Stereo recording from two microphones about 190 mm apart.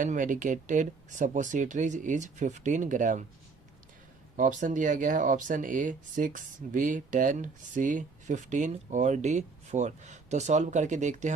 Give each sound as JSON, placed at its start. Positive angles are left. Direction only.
{"t": 0.0, "sound": "speech", "side_deg": -40}
{"t": 4.4, "sound": "speech", "side_deg": -40}